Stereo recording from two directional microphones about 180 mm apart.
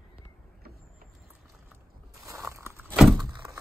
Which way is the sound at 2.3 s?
15° right (ahead or behind).